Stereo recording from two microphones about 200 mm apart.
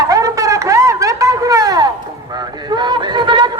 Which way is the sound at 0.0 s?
15° right (ahead or behind).